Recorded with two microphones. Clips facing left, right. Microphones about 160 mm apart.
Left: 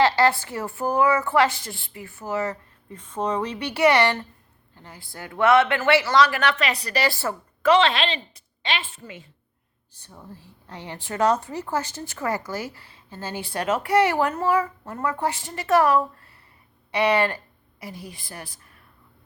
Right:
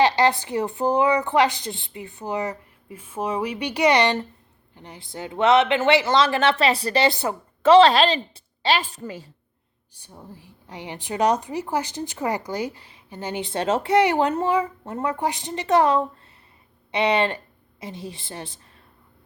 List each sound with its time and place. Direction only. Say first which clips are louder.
0.0 s a woman's voice: right 1 dB; 15° right (ahead or behind)
7.7 s a woman's voice: right 6 dB; 35° right (ahead or behind)
9.9 s a woman's voice: right 1 dB; 15° right (ahead or behind)